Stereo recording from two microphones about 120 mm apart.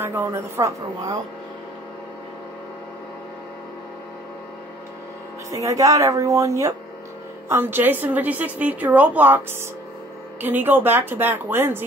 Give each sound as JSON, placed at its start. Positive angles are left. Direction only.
{"t": 0.0, "sound": "a woman's voice", "side_deg": -20}
{"t": 5.5, "sound": "a woman's voice", "side_deg": -30}